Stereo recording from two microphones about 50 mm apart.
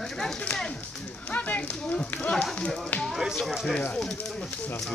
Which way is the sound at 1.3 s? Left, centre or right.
Left.